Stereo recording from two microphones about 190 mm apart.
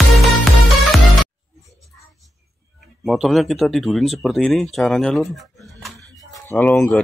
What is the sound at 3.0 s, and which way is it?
Speech, centre (ahead or behind).